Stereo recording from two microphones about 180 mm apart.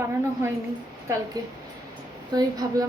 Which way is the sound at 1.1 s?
15° right (ahead or behind).